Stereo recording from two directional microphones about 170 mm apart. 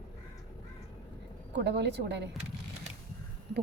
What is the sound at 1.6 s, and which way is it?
Speech, 85° right.